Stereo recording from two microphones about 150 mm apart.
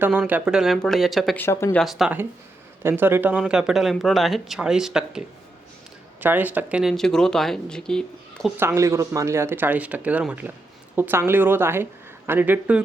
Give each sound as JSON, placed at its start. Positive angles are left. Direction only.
{"t": 0.0, "sound": "speech", "side_deg": -10}
{"t": 1.4, "sound": "speech", "side_deg": 15}
{"t": 1.8, "sound": "speech", "side_deg": 0}
{"t": 2.8, "sound": "speech", "side_deg": -15}
{"t": 8.5, "sound": "speech", "side_deg": -15}